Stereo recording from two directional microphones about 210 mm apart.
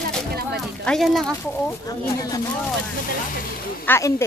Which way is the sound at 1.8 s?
15° left (ahead or behind).